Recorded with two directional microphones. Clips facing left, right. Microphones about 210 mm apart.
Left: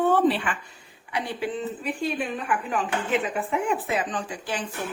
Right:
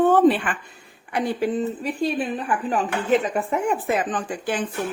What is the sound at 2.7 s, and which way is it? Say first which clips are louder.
A woman's voice: right 7 dB; 40° right (ahead or behind).